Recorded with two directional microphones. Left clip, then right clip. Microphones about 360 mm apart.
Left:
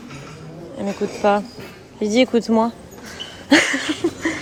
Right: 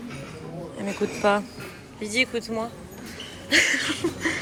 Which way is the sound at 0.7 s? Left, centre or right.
Centre.